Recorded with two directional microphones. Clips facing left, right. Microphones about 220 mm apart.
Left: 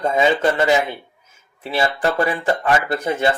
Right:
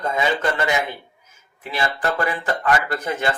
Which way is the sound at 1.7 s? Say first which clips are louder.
Left 4 dB; 25° left (ahead or behind).